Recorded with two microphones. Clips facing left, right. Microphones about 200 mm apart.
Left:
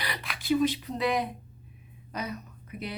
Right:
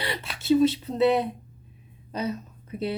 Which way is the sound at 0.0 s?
25° right (ahead or behind).